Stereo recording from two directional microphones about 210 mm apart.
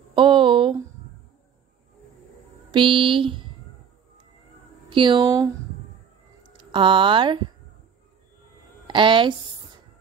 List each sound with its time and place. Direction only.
0.1 s a sound: 25° right (ahead or behind)
2.7 s speech: 25° right (ahead or behind)
4.8 s speech: 25° right (ahead or behind)
6.5 s speech: 20° right (ahead or behind)
8.8 s speech: 25° right (ahead or behind)